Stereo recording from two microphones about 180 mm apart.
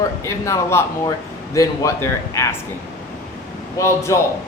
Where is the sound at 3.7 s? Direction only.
15° left (ahead or behind).